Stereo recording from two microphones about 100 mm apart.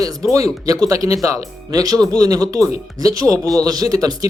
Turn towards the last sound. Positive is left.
turn(degrees=-35)  # may be behind; listen again after turning